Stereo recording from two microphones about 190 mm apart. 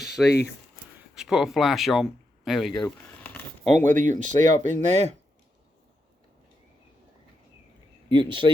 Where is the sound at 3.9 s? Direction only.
40° right (ahead or behind).